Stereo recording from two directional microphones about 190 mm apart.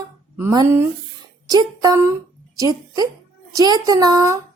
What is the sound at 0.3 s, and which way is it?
Speech, 15° right (ahead or behind).